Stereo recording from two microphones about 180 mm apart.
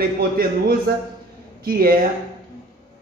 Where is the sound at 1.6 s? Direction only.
55° right (ahead or behind).